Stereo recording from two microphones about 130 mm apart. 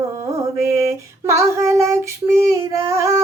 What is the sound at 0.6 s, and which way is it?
Female singing, 20° right (ahead or behind).